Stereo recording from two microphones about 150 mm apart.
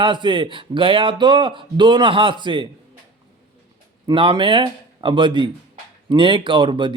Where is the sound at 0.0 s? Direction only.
30° right (ahead or behind).